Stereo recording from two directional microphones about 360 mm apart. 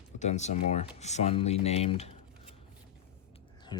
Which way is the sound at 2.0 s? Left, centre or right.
Centre.